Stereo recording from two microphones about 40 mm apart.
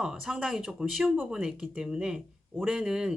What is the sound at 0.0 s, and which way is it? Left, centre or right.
Speech, centre.